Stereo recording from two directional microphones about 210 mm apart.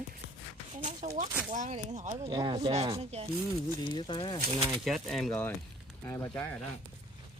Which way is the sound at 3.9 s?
20° left (ahead or behind).